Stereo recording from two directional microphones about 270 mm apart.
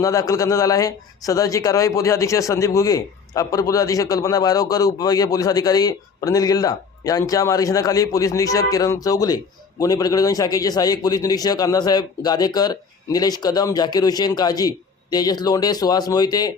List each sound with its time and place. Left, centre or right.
0.0 s speech: centre